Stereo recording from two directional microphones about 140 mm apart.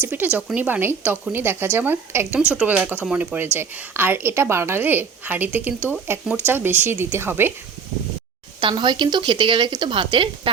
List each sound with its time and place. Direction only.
0.0 s a woman's voice: 15° right (ahead or behind)
8.6 s speech: 35° right (ahead or behind)